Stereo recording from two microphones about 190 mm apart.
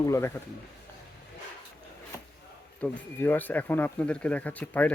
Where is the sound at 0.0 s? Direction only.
15° left (ahead or behind).